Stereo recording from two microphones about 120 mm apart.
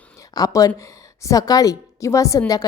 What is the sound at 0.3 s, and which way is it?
A woman's voice, 30° left (ahead or behind).